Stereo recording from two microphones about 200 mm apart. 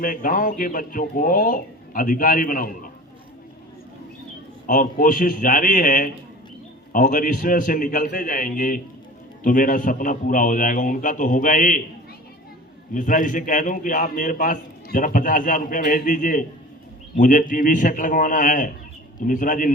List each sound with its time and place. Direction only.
0.0 s speech: 45° left (ahead or behind)
4.6 s a man's voice: 45° left (ahead or behind)
12.9 s a man's voice: 40° left (ahead or behind)